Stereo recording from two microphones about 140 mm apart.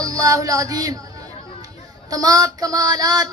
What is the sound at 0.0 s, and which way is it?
Speech, 25° right (ahead or behind).